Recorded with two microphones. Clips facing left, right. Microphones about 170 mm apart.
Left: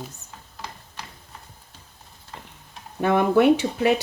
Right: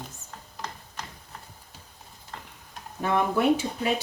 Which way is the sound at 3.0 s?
75° left (ahead or behind).